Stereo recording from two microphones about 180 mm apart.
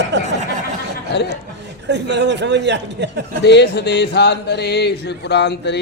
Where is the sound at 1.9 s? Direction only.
75° right (ahead or behind).